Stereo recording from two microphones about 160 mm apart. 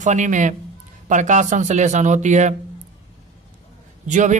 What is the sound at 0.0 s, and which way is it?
A man's voice, 50° right (ahead or behind).